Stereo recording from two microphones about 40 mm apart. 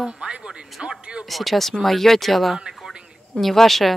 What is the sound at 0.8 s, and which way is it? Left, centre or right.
Speech, centre.